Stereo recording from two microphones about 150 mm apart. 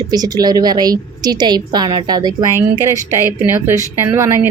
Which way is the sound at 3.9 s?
15° right (ahead or behind).